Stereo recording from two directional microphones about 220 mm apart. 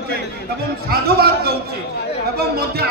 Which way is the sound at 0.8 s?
45° right (ahead or behind).